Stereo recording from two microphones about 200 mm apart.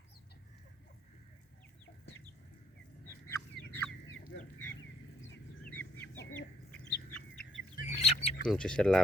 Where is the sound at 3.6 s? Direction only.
55° right (ahead or behind).